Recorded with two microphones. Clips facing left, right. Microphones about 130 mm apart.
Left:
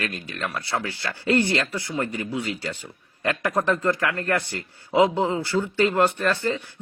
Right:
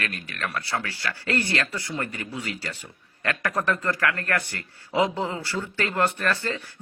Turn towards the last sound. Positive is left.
turn(degrees=20)  # may be behind; listen again after turning